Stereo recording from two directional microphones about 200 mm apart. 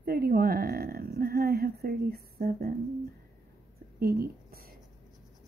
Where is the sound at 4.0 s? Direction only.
50° right (ahead or behind).